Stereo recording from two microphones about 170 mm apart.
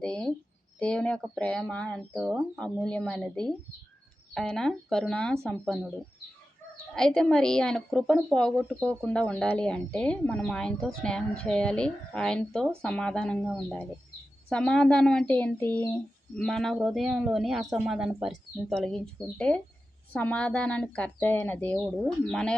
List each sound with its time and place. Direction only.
0.0 s speech: 5° left (ahead or behind)
6.9 s speech: 5° left (ahead or behind)
21.8 s speech: 5° right (ahead or behind)
22.3 s speech: 5° left (ahead or behind)